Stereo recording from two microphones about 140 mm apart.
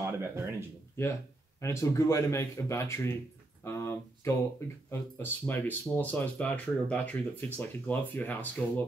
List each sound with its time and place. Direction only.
0.0 s speech: 20° right (ahead or behind)
1.6 s speech: 20° left (ahead or behind)
3.6 s a sound: 20° left (ahead or behind)
4.9 s speech: 15° left (ahead or behind)